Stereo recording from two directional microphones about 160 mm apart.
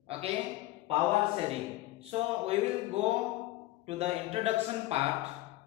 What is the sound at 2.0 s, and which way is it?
A man's voice, 40° right (ahead or behind).